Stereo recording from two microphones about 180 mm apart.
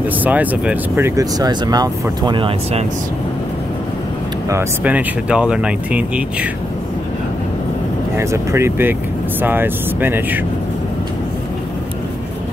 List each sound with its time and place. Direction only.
0.2 s speech: 10° right (ahead or behind); by 2.8 s 30° right (ahead or behind)
4.5 s speech: 10° right (ahead or behind)
8.2 s speech: 15° right (ahead or behind)